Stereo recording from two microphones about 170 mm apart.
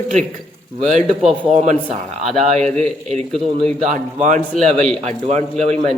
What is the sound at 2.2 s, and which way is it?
A man's voice, centre (ahead or behind).